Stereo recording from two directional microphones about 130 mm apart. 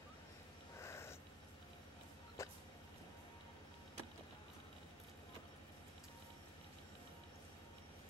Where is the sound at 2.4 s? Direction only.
20° left (ahead or behind).